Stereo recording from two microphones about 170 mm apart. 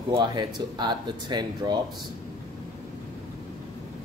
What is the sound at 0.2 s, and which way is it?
Speech, 25° right (ahead or behind).